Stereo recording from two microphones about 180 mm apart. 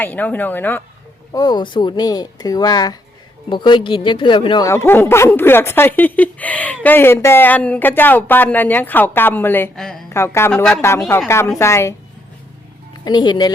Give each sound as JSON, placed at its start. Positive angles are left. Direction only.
{"t": 0.0, "sound": "speech", "side_deg": 10}
{"t": 1.3, "sound": "speech", "side_deg": 20}
{"t": 10.1, "sound": "a man's voice", "side_deg": 15}
{"t": 10.5, "sound": "speech", "side_deg": 5}
{"t": 11.3, "sound": "speech", "side_deg": 15}
{"t": 13.1, "sound": "speech", "side_deg": 25}